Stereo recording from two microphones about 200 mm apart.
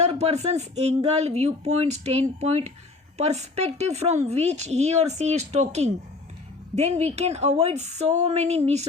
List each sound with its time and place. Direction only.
0.0 s speech: 35° right (ahead or behind)